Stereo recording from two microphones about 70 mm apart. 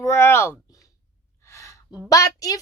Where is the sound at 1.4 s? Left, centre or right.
Left.